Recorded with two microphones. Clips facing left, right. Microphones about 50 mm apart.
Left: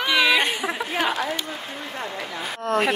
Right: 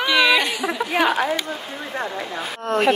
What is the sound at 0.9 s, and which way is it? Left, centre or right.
Speech, right.